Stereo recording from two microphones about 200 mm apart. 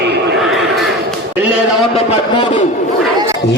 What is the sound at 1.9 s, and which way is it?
Speech, 25° left (ahead or behind).